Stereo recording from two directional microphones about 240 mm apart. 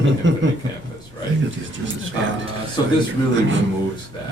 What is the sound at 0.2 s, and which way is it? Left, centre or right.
Speech, right.